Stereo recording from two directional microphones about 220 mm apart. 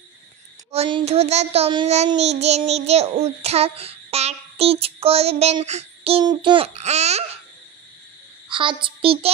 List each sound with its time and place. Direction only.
0.7 s child singing: 25° right (ahead or behind)
8.5 s a child's voice: 20° right (ahead or behind)